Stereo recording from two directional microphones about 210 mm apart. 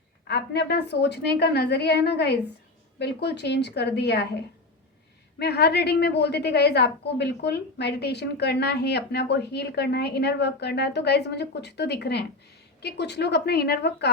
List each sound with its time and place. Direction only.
0.3 s a woman's voice: 50° left (ahead or behind)